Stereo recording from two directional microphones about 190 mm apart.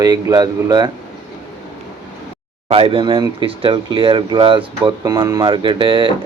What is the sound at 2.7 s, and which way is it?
Speech, 30° right (ahead or behind).